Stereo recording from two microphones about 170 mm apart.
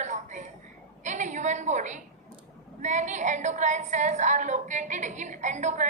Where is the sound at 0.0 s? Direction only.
45° right (ahead or behind).